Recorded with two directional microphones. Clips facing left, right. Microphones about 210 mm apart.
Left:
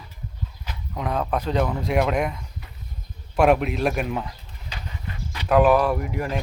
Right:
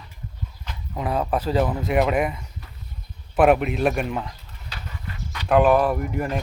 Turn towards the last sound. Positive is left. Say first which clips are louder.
# right 1 dB
turn(degrees=0)  # may be behind; listen again after turning